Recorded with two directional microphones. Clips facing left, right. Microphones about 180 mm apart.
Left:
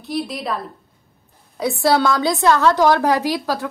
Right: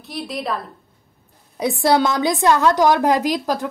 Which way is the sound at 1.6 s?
20° right (ahead or behind).